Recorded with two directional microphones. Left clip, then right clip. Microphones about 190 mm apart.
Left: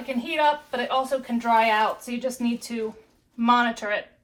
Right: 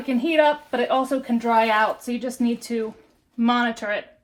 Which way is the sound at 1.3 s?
50° right (ahead or behind).